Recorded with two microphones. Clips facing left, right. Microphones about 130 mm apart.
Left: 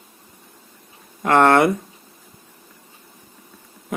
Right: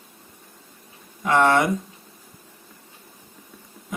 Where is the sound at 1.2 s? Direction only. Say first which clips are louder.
Left 4 dB; 60° left (ahead or behind).